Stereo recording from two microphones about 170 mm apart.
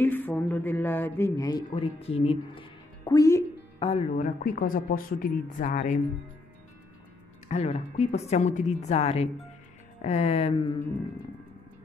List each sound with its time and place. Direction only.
0.0 s speech: 10° left (ahead or behind)
1.8 s a woman's voice: 35° left (ahead or behind)
3.1 s speech: 20° left (ahead or behind)
3.8 s a woman's voice: 30° left (ahead or behind)
4.2 s speech: 55° left (ahead or behind)
7.4 s a woman's voice: 40° left (ahead or behind)